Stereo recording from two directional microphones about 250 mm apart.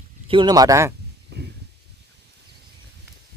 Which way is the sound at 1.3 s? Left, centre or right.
Right.